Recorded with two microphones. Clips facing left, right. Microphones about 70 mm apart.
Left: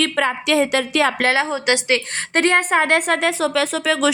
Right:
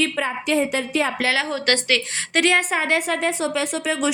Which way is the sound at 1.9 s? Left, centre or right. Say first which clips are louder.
Left 2 dB; left.